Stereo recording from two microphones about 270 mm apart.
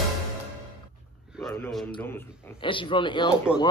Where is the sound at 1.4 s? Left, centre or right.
Centre.